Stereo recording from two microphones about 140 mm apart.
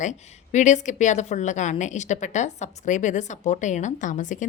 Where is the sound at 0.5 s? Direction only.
60° left (ahead or behind).